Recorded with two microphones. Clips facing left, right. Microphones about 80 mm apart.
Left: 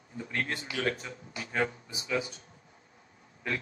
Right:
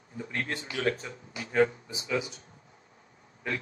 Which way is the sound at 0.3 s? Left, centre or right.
Right.